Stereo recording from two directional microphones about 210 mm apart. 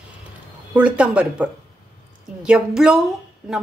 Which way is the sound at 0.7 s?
5° right (ahead or behind).